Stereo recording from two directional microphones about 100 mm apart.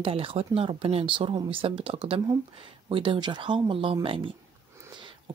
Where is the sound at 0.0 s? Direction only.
65° right (ahead or behind).